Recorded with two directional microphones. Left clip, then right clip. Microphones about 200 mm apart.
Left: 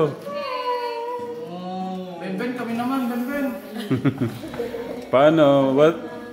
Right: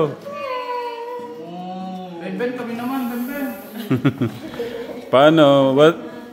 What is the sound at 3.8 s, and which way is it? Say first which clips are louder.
A man's voice: right 3 dB; 30° right (ahead or behind).